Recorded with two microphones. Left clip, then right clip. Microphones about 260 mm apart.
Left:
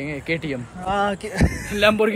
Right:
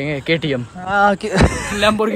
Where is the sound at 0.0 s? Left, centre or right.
Right.